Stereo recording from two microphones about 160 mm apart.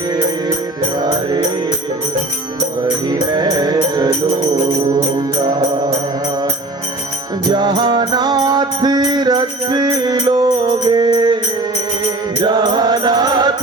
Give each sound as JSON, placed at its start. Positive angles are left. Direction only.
{"t": 1.0, "sound": "music", "side_deg": -25}
{"t": 2.8, "sound": "music", "side_deg": -25}
{"t": 5.1, "sound": "music", "side_deg": -25}
{"t": 7.5, "sound": "music", "side_deg": -25}
{"t": 12.4, "sound": "mantra", "side_deg": -25}